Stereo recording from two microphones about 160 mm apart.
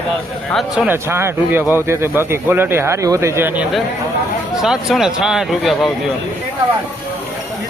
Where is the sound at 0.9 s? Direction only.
15° right (ahead or behind).